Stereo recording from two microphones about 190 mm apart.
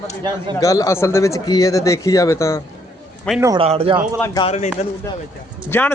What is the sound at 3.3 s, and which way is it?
Speech, 15° right (ahead or behind).